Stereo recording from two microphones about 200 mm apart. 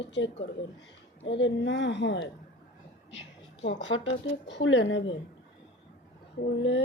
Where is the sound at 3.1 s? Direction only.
65° left (ahead or behind).